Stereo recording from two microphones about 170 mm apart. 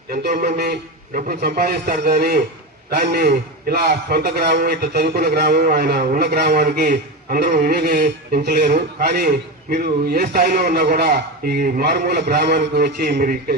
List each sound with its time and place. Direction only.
0.1 s a man's voice: 65° right (ahead or behind)